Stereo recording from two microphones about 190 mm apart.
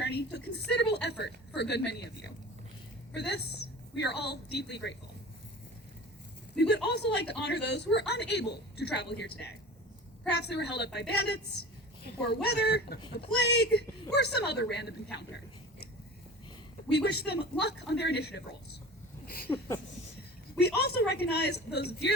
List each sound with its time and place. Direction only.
0.0 s a sound: 60° left (ahead or behind)
1.7 s speech: 60° left (ahead or behind)
6.8 s speech: 60° left (ahead or behind)
10.5 s speech: 60° left (ahead or behind)
16.9 s speech: 60° left (ahead or behind)
19.5 s a sound: 10° left (ahead or behind)
20.6 s speech: 60° left (ahead or behind)